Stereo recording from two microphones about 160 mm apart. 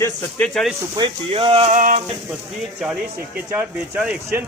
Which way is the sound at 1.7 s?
55° right (ahead or behind).